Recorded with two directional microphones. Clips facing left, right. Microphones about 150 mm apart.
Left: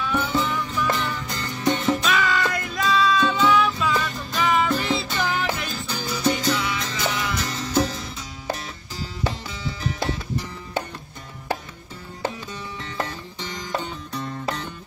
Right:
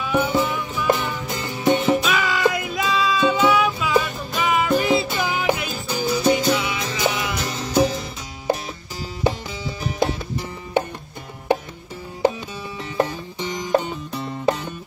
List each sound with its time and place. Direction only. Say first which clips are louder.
0.0 s music: right 4 dB; 15° right (ahead or behind)
2.0 s music: right 2 dB; centre (ahead or behind)
10.0 s music: right 6 dB; 15° right (ahead or behind)
12.9 s music: right 9 dB; 15° right (ahead or behind)